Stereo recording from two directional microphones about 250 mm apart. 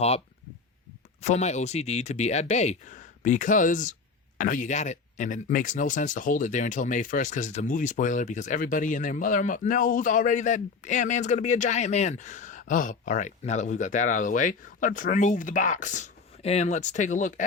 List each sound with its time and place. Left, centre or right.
1.2 s speech: left